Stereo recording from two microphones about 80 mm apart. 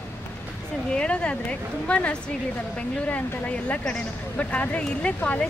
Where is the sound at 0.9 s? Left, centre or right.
Centre.